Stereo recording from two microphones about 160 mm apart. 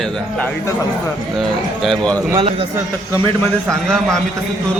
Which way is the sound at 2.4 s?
35° right (ahead or behind).